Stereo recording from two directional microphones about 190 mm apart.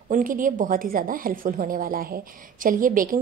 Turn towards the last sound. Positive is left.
turn(degrees=-45)  # may be behind; listen again after turning